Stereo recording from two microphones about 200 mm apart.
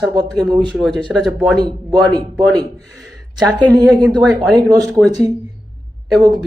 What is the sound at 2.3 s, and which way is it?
Speech, centre (ahead or behind).